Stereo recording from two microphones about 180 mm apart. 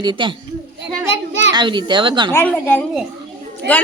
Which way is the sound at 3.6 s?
70° right (ahead or behind).